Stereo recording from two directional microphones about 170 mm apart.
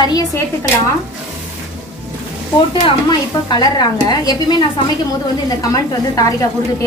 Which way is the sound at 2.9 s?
25° left (ahead or behind).